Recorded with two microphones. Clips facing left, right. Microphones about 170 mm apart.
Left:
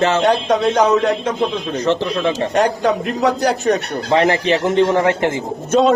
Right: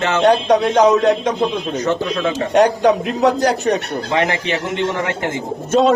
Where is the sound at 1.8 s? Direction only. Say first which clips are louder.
Left 2 dB; 30° left (ahead or behind).